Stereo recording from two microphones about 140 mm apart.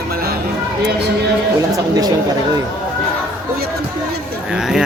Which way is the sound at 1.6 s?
25° right (ahead or behind).